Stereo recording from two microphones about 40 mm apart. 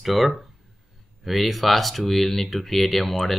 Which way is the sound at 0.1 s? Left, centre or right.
Centre.